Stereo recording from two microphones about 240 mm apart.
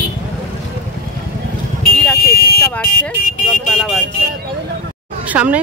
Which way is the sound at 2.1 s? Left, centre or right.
Left.